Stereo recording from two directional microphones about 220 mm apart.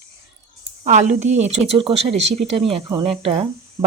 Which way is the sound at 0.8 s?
30° right (ahead or behind).